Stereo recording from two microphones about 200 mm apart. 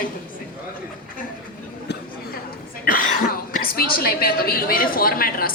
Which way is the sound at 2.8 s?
45° left (ahead or behind).